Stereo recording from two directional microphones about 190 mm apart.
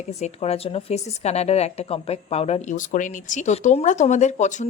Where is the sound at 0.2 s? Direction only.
35° left (ahead or behind).